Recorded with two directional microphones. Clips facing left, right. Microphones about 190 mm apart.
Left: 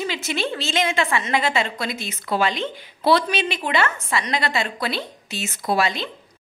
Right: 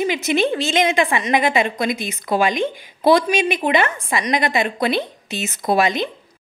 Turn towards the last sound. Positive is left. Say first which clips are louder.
# right 4 dB
turn(degrees=-20)  # may be behind; listen again after turning